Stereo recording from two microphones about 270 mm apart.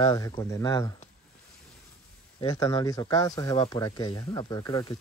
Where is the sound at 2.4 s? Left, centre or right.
Centre.